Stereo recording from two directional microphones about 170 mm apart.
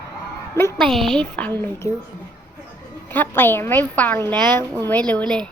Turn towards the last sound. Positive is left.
turn(degrees=10)  # may be behind; listen again after turning